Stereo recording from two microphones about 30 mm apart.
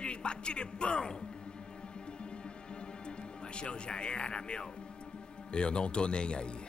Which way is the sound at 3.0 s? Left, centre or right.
Left.